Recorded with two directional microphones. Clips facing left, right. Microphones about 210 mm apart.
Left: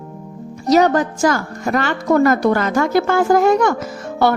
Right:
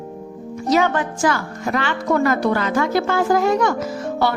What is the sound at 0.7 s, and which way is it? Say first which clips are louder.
A woman's voice: left 5 dB; 40° left (ahead or behind).